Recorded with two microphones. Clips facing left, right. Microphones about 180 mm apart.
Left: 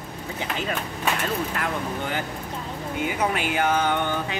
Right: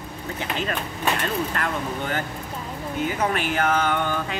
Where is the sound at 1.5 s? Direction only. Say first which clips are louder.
Right 1 dB; 5° left (ahead or behind).